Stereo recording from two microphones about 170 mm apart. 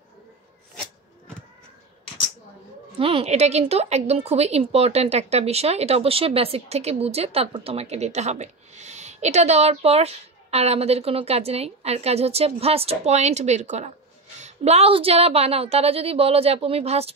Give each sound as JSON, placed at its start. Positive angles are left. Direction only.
{"t": 3.0, "sound": "a woman's voice", "side_deg": -35}